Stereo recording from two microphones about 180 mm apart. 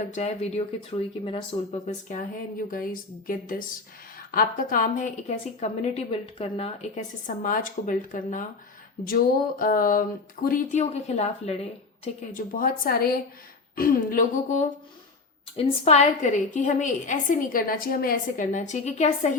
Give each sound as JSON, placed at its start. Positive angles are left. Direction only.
{"t": 0.1, "sound": "a woman's voice", "side_deg": 35}
{"t": 12.5, "sound": "a woman's voice", "side_deg": 50}
{"t": 15.5, "sound": "a woman's voice", "side_deg": 35}